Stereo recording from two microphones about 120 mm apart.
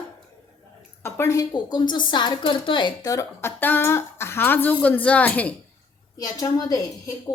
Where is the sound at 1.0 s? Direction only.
25° left (ahead or behind); by 3.1 s 40° left (ahead or behind).